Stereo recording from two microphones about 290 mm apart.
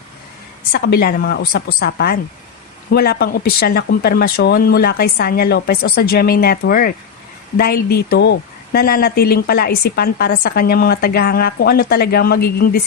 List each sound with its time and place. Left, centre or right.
0.7 s a woman's voice: left